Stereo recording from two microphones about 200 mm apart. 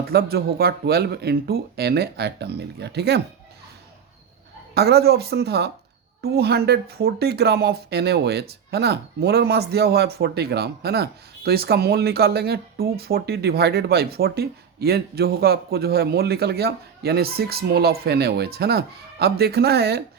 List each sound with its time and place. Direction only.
0.1 s speech: 50° right (ahead or behind)
4.7 s speech: 55° right (ahead or behind)